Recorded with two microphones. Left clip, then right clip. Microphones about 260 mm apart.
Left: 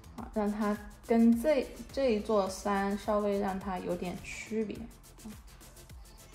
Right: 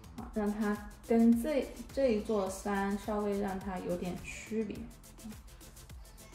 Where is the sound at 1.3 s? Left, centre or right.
Centre.